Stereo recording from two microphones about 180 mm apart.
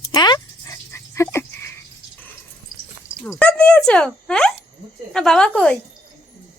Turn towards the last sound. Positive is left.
turn(degrees=5)  # may be behind; listen again after turning